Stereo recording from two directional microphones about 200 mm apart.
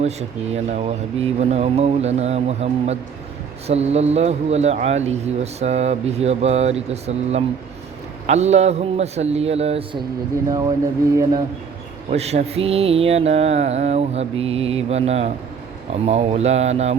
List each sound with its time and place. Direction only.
0.0 s speech: 35° right (ahead or behind)
11.2 s speech: 20° right (ahead or behind)
12.1 s speech: 30° right (ahead or behind)